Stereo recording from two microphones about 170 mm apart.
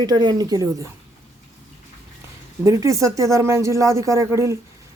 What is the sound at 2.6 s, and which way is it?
Speech, 20° right (ahead or behind).